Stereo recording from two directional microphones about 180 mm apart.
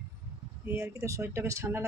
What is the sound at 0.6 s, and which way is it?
Speech, 15° right (ahead or behind).